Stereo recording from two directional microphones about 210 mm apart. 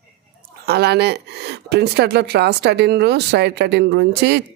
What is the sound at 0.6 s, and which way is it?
Speech, 50° right (ahead or behind).